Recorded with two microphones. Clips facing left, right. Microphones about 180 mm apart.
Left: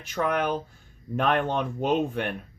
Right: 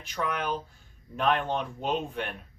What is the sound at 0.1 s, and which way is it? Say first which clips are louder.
Speech: left 5 dB; 50° left (ahead or behind).